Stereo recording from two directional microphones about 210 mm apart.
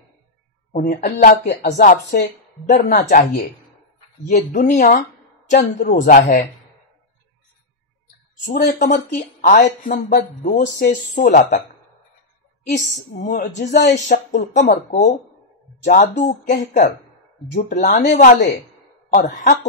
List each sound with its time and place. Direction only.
0.7 s speech: 45° left (ahead or behind)
8.7 s speech: 35° left (ahead or behind)
13.2 s speech: 35° left (ahead or behind)